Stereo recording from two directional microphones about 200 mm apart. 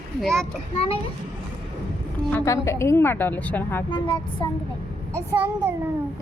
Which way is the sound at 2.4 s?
15° left (ahead or behind).